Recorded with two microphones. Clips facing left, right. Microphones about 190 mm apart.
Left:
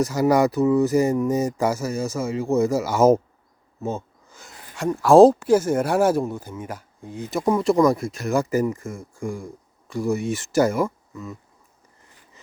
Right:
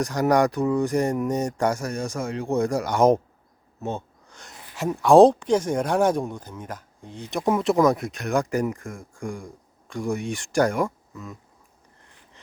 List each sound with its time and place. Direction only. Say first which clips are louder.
0.0 s speech: left 2 dB; 5° left (ahead or behind)